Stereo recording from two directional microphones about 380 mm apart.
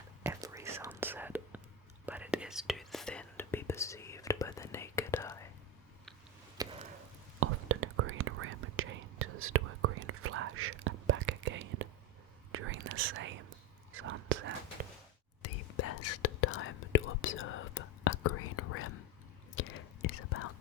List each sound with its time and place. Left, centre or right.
0.2 s whispering: centre
6.6 s a sound: centre
7.3 s whispering: right
15.4 s whispering: left